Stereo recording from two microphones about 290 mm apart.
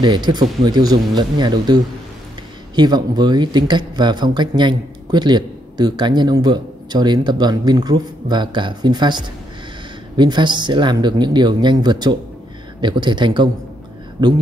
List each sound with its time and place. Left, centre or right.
0.0 s speech: centre